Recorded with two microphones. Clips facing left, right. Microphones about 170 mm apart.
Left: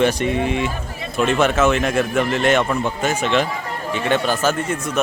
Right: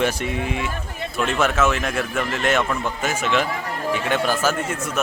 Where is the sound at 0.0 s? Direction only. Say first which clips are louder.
Left 5 dB; 5° right (ahead or behind).